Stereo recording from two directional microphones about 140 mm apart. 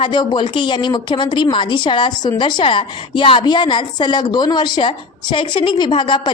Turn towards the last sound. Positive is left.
turn(degrees=35)  # may be behind; listen again after turning